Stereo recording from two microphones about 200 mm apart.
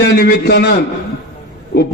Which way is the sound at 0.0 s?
50° left (ahead or behind).